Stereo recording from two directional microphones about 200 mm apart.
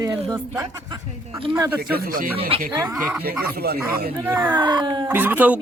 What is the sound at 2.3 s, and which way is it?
Speech, 30° right (ahead or behind).